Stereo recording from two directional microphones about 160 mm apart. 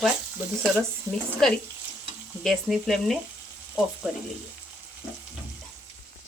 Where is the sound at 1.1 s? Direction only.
15° left (ahead or behind).